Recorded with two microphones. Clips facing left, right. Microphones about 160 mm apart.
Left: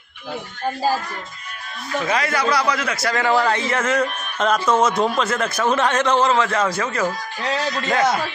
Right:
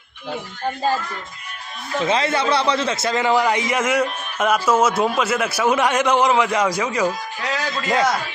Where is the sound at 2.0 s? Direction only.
25° right (ahead or behind).